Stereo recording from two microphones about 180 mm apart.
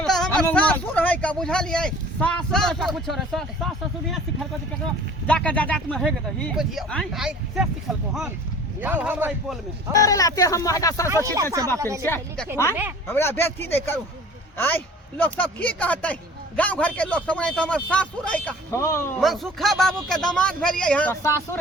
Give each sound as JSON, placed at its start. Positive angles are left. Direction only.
{"t": 0.0, "sound": "speech", "side_deg": 5}
{"t": 5.2, "sound": "a man's voice", "side_deg": 5}
{"t": 10.0, "sound": "speech", "side_deg": 20}
{"t": 11.1, "sound": "a man's voice", "side_deg": -15}
{"t": 12.0, "sound": "a man's voice", "side_deg": 10}
{"t": 15.2, "sound": "a man's voice", "side_deg": 10}
{"t": 19.2, "sound": "speech", "side_deg": 0}